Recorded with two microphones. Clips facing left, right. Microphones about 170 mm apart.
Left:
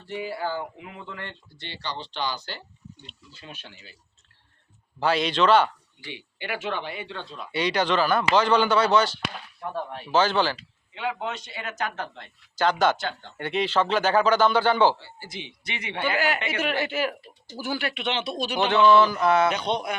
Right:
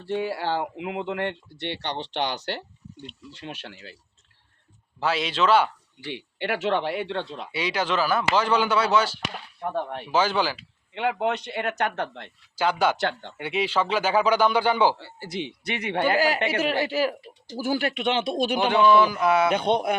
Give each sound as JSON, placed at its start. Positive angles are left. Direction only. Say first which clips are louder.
{"t": 0.0, "sound": "speech", "louder": "right 4 dB", "side_deg": -85}
{"t": 4.9, "sound": "speech", "louder": "left 2 dB", "side_deg": -5}
{"t": 6.0, "sound": "speech", "louder": "right 6 dB", "side_deg": -65}
{"t": 7.5, "sound": "a man's voice", "louder": "left 2 dB", "side_deg": -5}
{"t": 10.9, "sound": "speech", "louder": "right 5 dB", "side_deg": -60}
{"t": 12.5, "sound": "a man's voice", "louder": "left 1 dB", "side_deg": -10}
{"t": 13.0, "sound": "speech", "louder": "right 5 dB", "side_deg": -70}
{"t": 13.3, "sound": "a man's voice", "louder": "left 5 dB", "side_deg": -10}
{"t": 14.9, "sound": "speech", "louder": "right 7 dB", "side_deg": -65}
{"t": 18.6, "sound": "a man's voice", "louder": "left 1 dB", "side_deg": -10}
{"t": 19.5, "sound": "speech", "louder": "right 5 dB", "side_deg": -55}